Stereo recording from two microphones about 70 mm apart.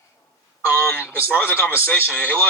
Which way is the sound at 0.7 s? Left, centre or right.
Left.